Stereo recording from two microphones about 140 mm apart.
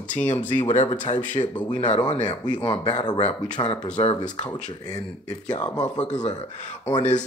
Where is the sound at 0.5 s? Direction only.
55° left (ahead or behind).